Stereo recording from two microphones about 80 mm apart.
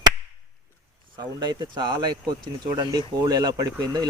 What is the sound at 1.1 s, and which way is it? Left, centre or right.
Speech, right.